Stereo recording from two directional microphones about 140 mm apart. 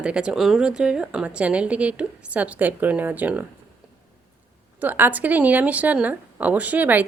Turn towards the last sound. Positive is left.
turn(degrees=-10)  # may be behind; listen again after turning